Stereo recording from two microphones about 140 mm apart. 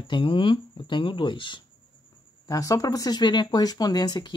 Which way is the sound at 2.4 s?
25° left (ahead or behind).